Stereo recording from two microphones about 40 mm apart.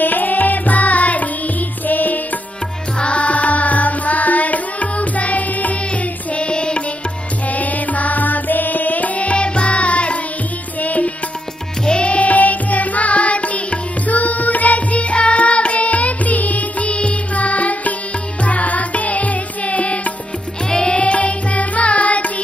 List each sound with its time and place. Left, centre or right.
0.0 s music: left
3.0 s music: left
6.3 s music: left
7.4 s music: left
11.8 s music: left
20.7 s music: left